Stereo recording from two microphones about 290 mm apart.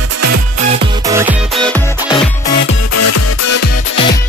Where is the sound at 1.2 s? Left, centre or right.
Centre.